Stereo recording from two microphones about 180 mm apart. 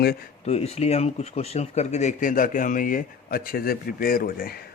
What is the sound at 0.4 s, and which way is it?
Speech, 35° left (ahead or behind).